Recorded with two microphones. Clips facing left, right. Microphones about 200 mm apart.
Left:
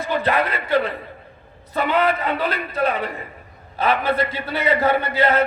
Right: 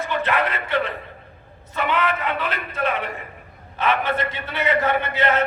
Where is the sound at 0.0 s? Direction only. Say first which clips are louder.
Left 2 dB; 35° left (ahead or behind).